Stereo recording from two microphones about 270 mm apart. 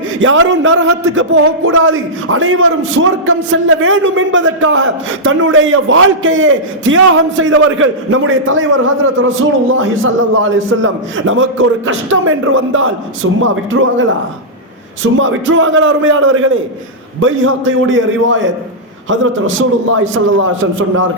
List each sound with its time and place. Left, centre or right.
0.2 s speech: right
15.2 s speech: right